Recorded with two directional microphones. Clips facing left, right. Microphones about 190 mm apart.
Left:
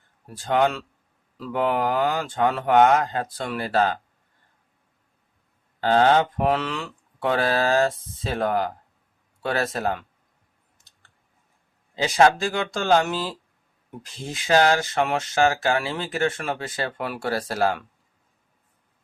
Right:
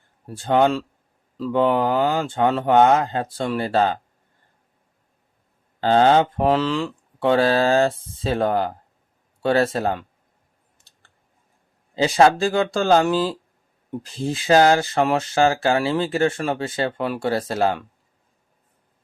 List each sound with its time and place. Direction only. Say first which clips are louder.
0.3 s speech: right 4 dB; 30° right (ahead or behind)
5.8 s speech: right 3 dB; 30° right (ahead or behind)
11.9 s speech: right 3 dB; 30° right (ahead or behind)